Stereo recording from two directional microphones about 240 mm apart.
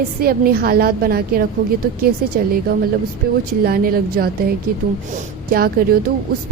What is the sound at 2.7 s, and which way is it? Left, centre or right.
A woman's voice, right.